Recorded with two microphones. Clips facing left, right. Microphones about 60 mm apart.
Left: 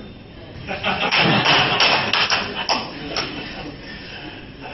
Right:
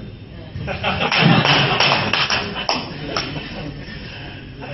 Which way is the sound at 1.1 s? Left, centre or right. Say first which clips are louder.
Right 2 dB; centre.